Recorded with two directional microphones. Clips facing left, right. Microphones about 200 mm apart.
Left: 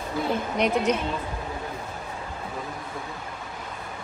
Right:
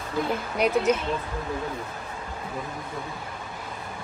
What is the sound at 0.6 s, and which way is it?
Speech, 5° right (ahead or behind).